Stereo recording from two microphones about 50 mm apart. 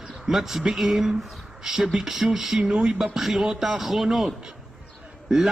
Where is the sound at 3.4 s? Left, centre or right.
Centre.